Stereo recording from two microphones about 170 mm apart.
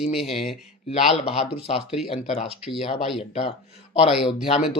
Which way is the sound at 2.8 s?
35° left (ahead or behind).